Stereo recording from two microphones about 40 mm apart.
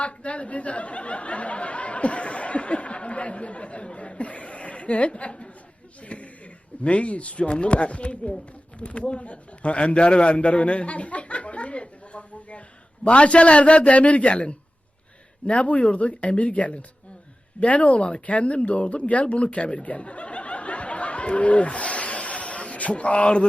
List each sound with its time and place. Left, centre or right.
0.0 s speech: left
6.1 s a sound: left
6.8 s a man's voice: left